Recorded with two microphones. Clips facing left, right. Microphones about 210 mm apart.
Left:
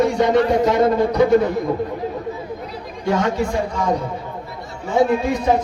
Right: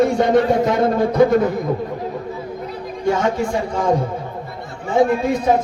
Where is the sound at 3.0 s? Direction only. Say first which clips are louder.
Right 1 dB; 50° right (ahead or behind).